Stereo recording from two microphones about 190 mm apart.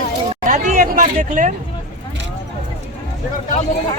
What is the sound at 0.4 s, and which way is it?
Speech, 45° right (ahead or behind).